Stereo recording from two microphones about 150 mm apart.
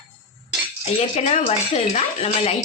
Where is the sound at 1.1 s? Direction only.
45° left (ahead or behind).